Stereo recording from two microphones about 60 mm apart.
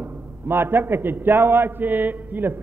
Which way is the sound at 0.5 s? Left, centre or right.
Right.